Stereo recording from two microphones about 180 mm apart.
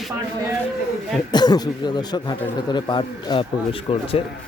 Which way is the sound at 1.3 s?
25° left (ahead or behind).